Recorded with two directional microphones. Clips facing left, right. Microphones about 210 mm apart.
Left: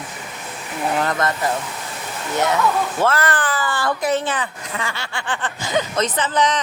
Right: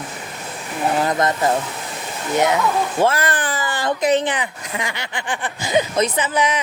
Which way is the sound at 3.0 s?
15° right (ahead or behind).